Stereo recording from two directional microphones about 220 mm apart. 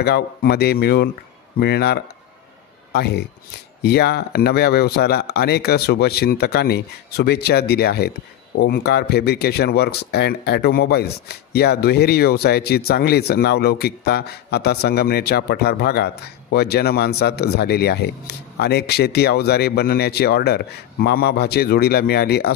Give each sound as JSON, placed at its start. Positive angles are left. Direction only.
{"t": 0.0, "sound": "speech", "side_deg": 45}